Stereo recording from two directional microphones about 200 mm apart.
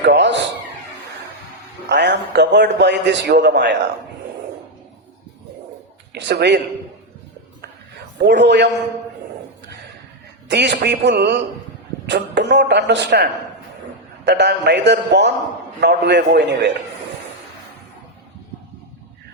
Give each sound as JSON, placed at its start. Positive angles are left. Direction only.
{"t": 0.0, "sound": "a sound", "side_deg": -60}
{"t": 1.9, "sound": "a man's voice", "side_deg": -60}
{"t": 6.1, "sound": "speech", "side_deg": -60}
{"t": 8.3, "sound": "speech", "side_deg": -60}
{"t": 10.5, "sound": "speech", "side_deg": -60}
{"t": 14.3, "sound": "speech", "side_deg": -55}